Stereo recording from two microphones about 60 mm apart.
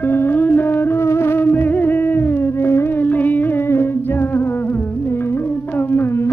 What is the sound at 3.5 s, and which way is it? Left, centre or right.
Music, left.